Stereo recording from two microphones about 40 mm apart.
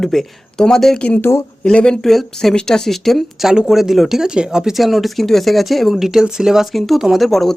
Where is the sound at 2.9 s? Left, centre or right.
Centre.